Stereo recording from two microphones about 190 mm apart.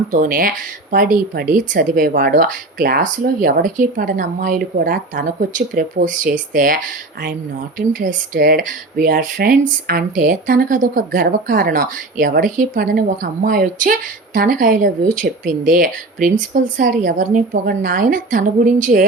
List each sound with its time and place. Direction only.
0.1 s speech: 45° right (ahead or behind)
7.8 s speech: 45° right (ahead or behind)